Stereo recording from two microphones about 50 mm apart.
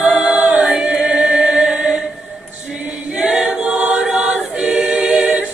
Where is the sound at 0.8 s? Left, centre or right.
Centre.